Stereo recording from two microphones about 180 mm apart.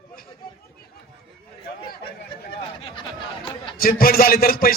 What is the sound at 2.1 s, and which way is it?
Chatter, 30° left (ahead or behind).